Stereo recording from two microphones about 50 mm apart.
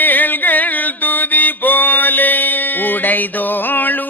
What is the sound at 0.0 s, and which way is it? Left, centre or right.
Mantra, left.